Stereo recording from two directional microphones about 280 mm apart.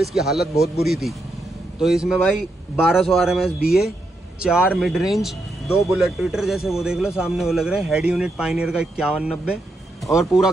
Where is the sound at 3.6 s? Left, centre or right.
Left.